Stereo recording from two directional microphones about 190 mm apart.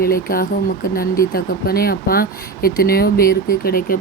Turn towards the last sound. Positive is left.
turn(degrees=50)  # may be behind; listen again after turning